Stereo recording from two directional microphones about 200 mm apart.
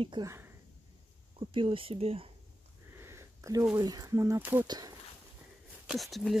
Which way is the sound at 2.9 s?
15° right (ahead or behind).